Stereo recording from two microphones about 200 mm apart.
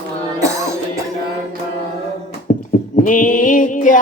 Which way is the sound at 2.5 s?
40° left (ahead or behind).